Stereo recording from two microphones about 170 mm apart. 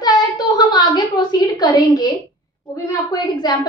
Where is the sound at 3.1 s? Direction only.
25° left (ahead or behind).